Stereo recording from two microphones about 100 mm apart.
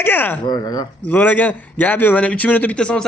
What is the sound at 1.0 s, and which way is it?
A man's voice, 20° left (ahead or behind).